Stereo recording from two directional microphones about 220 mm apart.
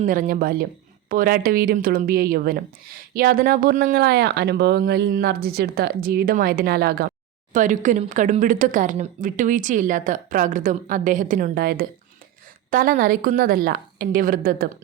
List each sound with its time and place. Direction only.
0.0 s a woman's voice: 40° right (ahead or behind)